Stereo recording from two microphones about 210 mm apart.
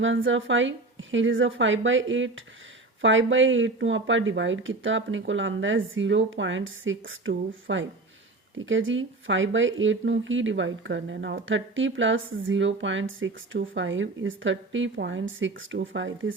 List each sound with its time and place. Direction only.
0.0 s speech: 65° right (ahead or behind)